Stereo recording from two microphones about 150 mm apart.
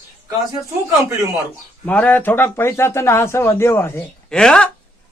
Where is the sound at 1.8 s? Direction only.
10° left (ahead or behind).